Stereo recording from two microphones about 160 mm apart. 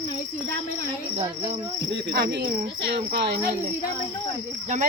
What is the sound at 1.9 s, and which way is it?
Cricket, 90° right.